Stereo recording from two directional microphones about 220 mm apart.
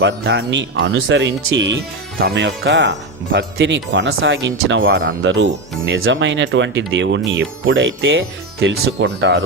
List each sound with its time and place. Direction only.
0.0 s speech: 50° right (ahead or behind)